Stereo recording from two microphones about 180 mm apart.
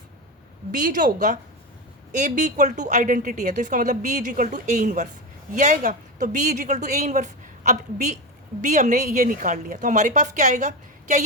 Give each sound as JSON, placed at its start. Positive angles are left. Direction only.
{"t": 0.7, "sound": "a woman's voice", "side_deg": -45}